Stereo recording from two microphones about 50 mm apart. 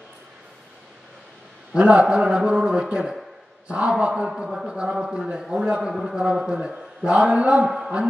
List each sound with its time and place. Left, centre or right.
1.7 s a man's voice: right
4.3 s a man's voice: centre